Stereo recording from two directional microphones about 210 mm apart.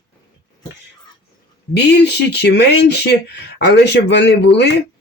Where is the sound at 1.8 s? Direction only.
55° left (ahead or behind).